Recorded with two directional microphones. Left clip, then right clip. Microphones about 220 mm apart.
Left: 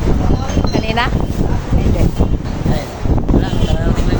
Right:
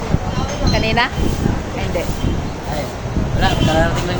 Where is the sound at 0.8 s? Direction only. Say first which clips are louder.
Right 2 dB; 5° right (ahead or behind).